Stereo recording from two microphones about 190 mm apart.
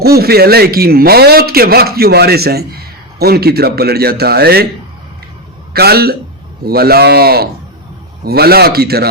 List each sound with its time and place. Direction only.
0.0 s a man's voice: 55° right (ahead or behind)
5.7 s a man's voice: 55° right (ahead or behind)